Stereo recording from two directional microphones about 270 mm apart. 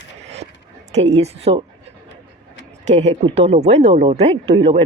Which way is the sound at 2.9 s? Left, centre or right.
Right.